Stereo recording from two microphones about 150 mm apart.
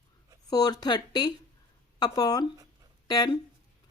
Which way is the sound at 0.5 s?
25° left (ahead or behind).